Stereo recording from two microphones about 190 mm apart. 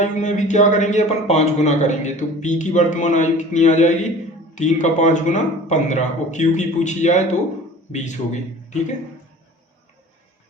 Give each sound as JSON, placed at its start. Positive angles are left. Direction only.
{"t": 0.0, "sound": "speech", "side_deg": 40}